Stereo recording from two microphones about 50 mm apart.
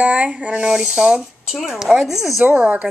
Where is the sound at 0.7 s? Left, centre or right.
Centre.